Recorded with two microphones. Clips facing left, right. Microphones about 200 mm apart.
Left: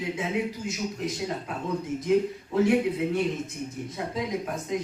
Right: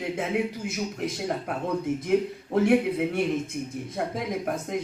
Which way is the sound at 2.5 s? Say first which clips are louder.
Right 1 dB; 55° right (ahead or behind).